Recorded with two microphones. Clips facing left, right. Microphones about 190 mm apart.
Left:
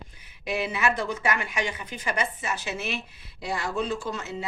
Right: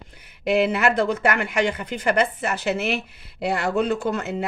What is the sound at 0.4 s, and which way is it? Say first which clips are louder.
A woman's voice: right 7 dB; 60° right (ahead or behind).